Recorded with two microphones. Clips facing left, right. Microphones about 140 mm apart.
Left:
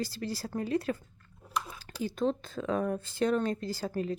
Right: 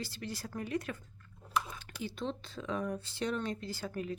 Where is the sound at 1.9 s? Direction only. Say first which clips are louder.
Left 8 dB; 45° left (ahead or behind).